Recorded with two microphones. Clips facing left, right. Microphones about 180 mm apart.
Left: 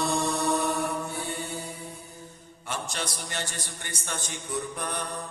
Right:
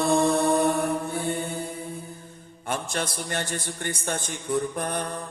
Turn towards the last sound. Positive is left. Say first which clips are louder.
# right 4 dB
turn(degrees=-50)  # may be behind; listen again after turning